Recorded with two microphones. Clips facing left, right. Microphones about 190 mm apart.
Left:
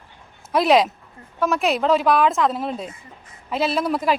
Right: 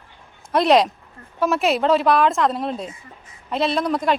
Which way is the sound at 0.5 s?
Centre (ahead or behind).